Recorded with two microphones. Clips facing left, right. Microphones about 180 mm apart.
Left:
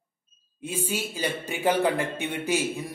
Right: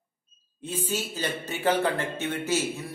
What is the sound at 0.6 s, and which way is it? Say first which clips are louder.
Speech: left 1 dB; 10° left (ahead or behind).